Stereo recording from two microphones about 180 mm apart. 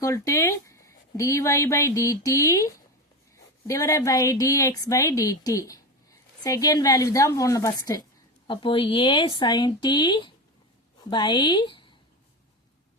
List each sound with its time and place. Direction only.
0.0 s a woman's voice: 15° left (ahead or behind)